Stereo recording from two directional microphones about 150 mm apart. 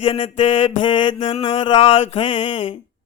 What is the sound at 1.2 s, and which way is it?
Mantra, 45° left (ahead or behind).